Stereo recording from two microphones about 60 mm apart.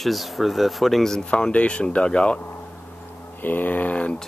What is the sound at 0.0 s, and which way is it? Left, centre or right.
Speech, centre.